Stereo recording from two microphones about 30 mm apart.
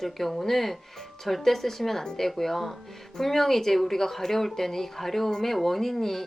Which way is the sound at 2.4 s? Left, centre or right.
Centre.